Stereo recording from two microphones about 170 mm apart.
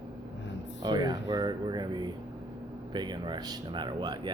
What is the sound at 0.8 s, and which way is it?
Speech, 25° right (ahead or behind).